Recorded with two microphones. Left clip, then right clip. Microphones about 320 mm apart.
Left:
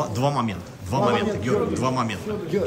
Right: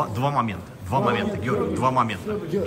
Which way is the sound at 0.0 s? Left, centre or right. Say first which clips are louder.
Even; centre.